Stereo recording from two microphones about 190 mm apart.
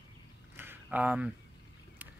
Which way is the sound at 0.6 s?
10° right (ahead or behind).